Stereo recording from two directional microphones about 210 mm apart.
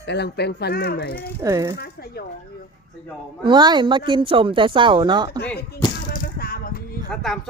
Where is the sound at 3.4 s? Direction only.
20° right (ahead or behind).